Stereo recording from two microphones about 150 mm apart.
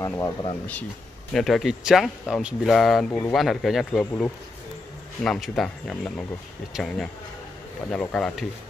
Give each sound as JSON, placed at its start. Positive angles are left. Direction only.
{"t": 0.2, "sound": "speech", "side_deg": 30}
{"t": 1.3, "sound": "speech", "side_deg": 0}
{"t": 3.1, "sound": "a man's voice", "side_deg": 15}
{"t": 3.3, "sound": "speech", "side_deg": 0}
{"t": 5.2, "sound": "speech", "side_deg": 5}